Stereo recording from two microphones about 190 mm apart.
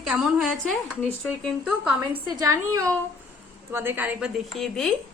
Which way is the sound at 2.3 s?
20° right (ahead or behind).